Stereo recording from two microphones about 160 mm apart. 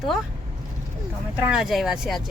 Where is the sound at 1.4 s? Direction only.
5° right (ahead or behind).